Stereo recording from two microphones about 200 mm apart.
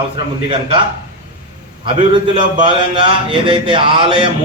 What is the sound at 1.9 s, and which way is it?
A man's voice, 25° right (ahead or behind).